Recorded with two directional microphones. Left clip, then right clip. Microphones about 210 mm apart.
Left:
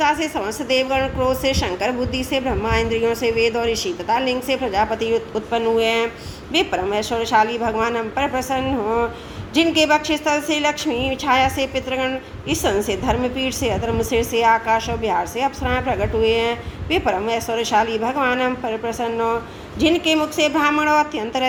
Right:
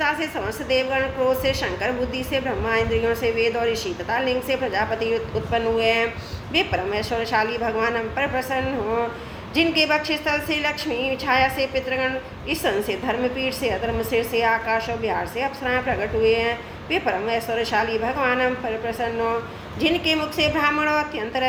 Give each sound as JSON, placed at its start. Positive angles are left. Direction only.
{"t": 0.0, "sound": "a woman's voice", "side_deg": 50}
{"t": 9.6, "sound": "a woman's voice", "side_deg": 10}
{"t": 9.9, "sound": "a woman's voice", "side_deg": 50}